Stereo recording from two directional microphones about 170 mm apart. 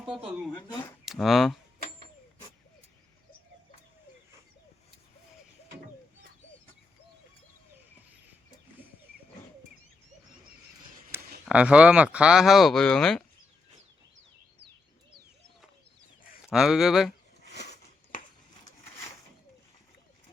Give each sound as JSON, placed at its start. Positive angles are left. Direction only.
{"t": 0.0, "sound": "speech", "side_deg": -5}
{"t": 11.1, "sound": "speech", "side_deg": -5}
{"t": 16.5, "sound": "speech", "side_deg": -5}
{"t": 17.6, "sound": "a sound", "side_deg": 80}